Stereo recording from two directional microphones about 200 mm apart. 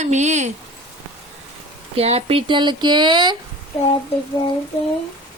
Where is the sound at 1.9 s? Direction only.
30° right (ahead or behind).